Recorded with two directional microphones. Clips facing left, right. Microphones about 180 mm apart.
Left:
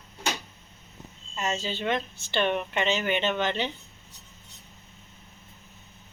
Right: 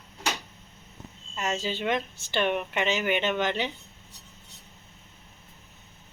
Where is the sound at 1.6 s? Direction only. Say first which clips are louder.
Right 1 dB; 15° right (ahead or behind).